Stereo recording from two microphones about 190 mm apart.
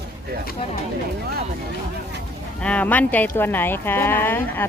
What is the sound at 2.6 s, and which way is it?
Speech, 5° left (ahead or behind).